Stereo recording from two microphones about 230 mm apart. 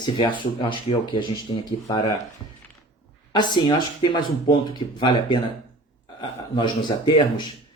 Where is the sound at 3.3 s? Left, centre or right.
Centre.